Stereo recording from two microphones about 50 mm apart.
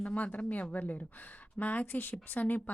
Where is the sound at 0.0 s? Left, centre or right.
Left.